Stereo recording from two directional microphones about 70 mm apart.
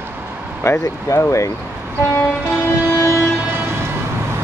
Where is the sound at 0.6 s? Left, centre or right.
Left.